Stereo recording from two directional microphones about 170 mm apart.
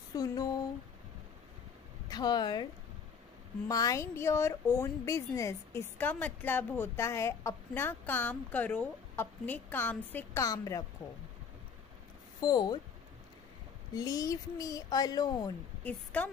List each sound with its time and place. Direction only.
0.1 s a sound: 20° left (ahead or behind)
2.0 s a woman's voice: 25° left (ahead or behind)
12.4 s speech: 25° left (ahead or behind)
13.9 s speech: 20° left (ahead or behind)
15.8 s a woman's voice: 10° left (ahead or behind)